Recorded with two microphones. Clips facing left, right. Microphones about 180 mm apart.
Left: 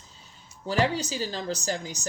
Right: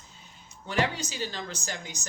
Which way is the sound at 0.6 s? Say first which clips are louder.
Left 3 dB; 35° left (ahead or behind).